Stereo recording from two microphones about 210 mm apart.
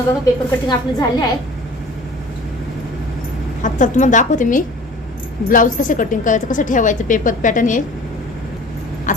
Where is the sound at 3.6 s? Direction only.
35° left (ahead or behind).